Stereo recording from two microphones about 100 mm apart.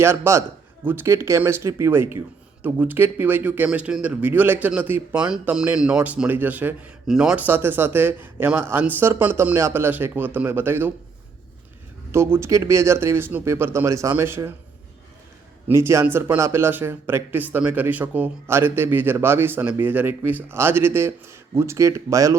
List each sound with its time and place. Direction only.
0.0 s speech: 25° right (ahead or behind)
12.1 s speech: 25° right (ahead or behind)
15.6 s speech: 25° right (ahead or behind)